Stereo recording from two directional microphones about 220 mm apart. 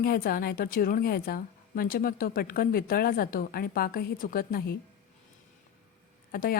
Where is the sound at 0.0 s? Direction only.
40° left (ahead or behind).